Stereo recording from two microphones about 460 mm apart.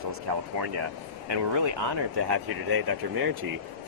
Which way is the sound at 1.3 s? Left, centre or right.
Right.